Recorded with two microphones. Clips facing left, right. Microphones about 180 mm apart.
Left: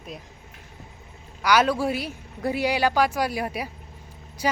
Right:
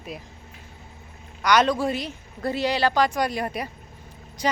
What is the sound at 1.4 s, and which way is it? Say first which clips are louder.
A man's voice: right 1 dB; 5° left (ahead or behind).